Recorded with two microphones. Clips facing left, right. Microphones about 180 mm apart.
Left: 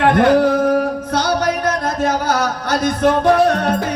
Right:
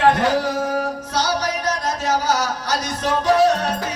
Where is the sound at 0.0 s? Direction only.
55° left (ahead or behind).